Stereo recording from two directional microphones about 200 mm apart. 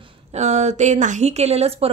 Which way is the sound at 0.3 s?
35° right (ahead or behind).